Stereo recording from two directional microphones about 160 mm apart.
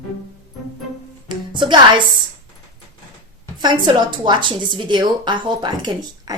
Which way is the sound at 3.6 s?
25° right (ahead or behind).